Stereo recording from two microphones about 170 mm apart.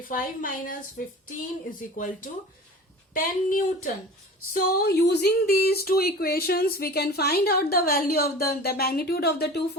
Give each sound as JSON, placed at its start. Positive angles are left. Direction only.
{"t": 0.1, "sound": "speech", "side_deg": 55}
{"t": 4.5, "sound": "speech", "side_deg": 70}